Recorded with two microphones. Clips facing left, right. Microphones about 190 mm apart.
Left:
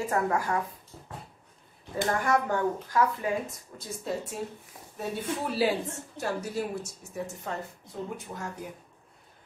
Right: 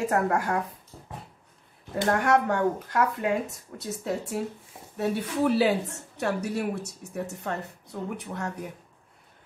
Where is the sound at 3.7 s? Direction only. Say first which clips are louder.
Right 3 dB; 70° right (ahead or behind).